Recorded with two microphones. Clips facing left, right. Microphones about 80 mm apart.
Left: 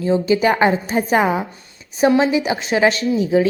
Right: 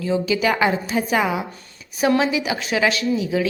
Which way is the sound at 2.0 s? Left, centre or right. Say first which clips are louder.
Left 4 dB; left.